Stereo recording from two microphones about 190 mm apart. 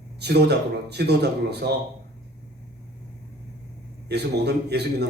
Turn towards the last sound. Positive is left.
turn(degrees=-60)  # may be behind; listen again after turning